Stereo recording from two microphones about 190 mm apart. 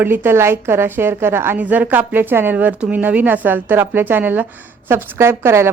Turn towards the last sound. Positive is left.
turn(degrees=-15)  # may be behind; listen again after turning